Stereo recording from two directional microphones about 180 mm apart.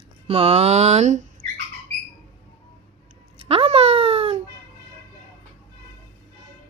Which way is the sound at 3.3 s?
35° right (ahead or behind).